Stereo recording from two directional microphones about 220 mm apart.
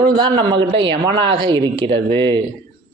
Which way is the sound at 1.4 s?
20° right (ahead or behind).